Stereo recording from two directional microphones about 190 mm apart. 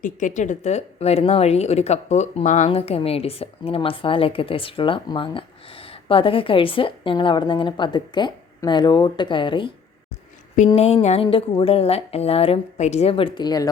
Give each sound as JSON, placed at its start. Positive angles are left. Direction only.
{"t": 0.0, "sound": "speech", "side_deg": 40}
{"t": 10.8, "sound": "a woman's voice", "side_deg": 35}